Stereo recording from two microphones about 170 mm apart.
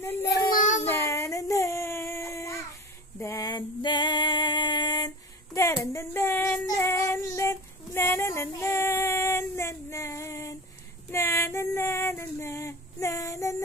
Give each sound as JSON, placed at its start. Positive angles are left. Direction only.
{"t": 0.6, "sound": "child singing", "side_deg": 45}
{"t": 0.8, "sound": "a sound", "side_deg": 15}
{"t": 3.2, "sound": "female singing", "side_deg": 20}